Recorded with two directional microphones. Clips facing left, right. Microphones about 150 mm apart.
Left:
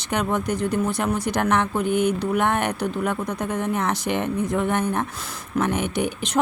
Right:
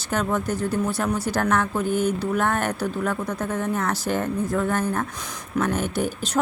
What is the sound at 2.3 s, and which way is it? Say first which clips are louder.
Speech: left 1 dB; 15° left (ahead or behind).